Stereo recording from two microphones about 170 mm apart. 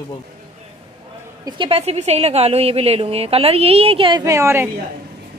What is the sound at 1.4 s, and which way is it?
A woman's voice, 30° right (ahead or behind).